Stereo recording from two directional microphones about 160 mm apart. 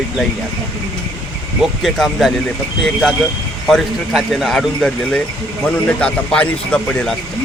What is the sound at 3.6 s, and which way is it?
Speech, centre (ahead or behind).